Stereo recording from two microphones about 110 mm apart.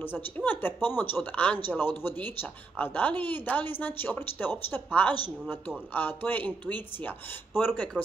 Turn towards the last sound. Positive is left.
turn(degrees=15)  # may be behind; listen again after turning